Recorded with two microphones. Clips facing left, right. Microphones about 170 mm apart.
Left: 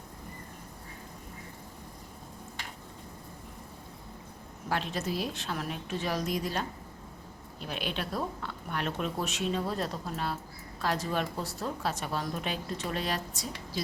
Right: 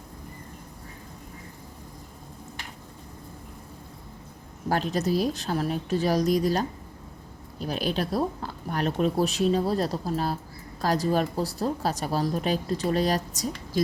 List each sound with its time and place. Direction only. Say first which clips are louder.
4.7 s speech: right 7 dB; 40° right (ahead or behind)